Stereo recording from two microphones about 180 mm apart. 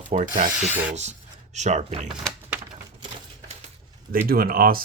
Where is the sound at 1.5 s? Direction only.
40° right (ahead or behind).